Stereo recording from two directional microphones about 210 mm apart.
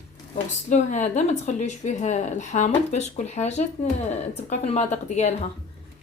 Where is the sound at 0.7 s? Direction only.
35° left (ahead or behind).